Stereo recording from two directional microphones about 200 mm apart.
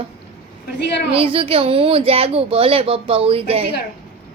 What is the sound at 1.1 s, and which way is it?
Speech, 30° right (ahead or behind).